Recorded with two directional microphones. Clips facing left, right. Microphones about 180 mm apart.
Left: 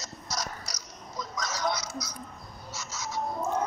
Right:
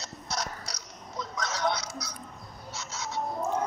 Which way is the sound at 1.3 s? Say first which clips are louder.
Right 1 dB; 60° right (ahead or behind).